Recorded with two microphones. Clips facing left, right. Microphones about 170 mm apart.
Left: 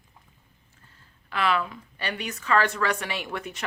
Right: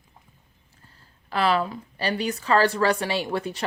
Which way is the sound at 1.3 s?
35° right (ahead or behind).